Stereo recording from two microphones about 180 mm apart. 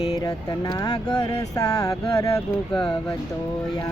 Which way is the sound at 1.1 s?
20° left (ahead or behind).